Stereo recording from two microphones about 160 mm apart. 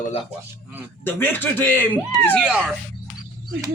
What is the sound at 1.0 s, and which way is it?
Speech, 15° left (ahead or behind).